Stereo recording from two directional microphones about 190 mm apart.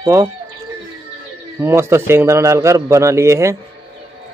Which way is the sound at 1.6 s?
15° right (ahead or behind).